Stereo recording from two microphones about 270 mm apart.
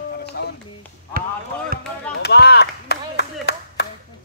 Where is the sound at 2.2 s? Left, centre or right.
Left.